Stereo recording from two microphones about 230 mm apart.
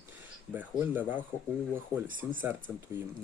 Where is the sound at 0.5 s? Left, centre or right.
Centre.